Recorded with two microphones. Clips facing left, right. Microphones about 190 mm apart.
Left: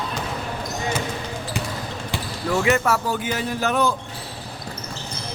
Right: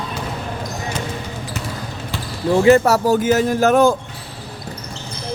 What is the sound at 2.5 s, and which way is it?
A man's voice, 35° right (ahead or behind).